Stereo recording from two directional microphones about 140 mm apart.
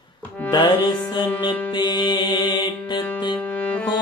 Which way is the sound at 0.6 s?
15° left (ahead or behind).